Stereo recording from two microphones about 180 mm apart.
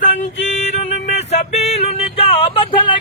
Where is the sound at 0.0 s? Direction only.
45° left (ahead or behind).